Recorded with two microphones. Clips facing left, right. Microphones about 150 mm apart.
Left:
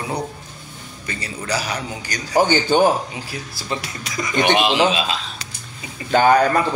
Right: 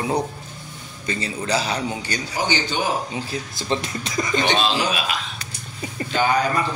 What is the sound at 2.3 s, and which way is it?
Speech, 50° left (ahead or behind).